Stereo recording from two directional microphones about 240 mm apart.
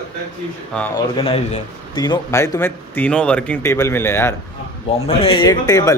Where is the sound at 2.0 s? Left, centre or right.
Centre.